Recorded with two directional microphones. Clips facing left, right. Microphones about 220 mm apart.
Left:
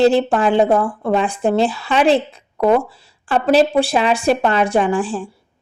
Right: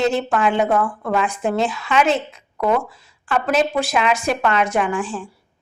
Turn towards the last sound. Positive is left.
turn(degrees=30)  # may be behind; listen again after turning